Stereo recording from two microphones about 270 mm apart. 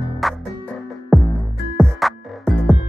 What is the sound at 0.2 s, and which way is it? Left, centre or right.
Music, centre.